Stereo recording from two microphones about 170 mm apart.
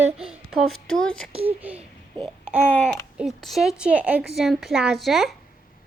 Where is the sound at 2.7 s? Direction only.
10° left (ahead or behind).